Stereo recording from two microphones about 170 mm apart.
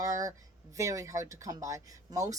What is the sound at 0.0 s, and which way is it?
A woman's voice, 20° right (ahead or behind).